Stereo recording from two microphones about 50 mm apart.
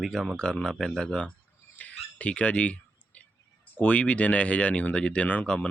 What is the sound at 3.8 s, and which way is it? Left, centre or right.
Speech, left.